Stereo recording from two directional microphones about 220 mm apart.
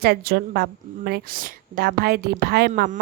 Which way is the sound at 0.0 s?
45° right (ahead or behind).